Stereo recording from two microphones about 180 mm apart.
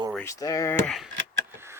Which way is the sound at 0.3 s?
20° left (ahead or behind).